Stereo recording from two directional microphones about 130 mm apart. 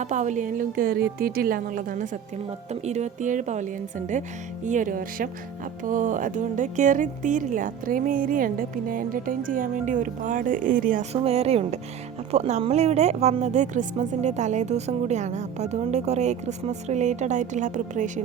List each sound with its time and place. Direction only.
0.0 s a woman's voice: 70° right (ahead or behind); by 2.0 s 90° right
2.8 s a woman's voice: 60° right (ahead or behind); by 5.3 s 90° right
5.9 s speech: 80° right
11.1 s a woman's voice: 50° right (ahead or behind); by 18.1 s 75° right (ahead or behind)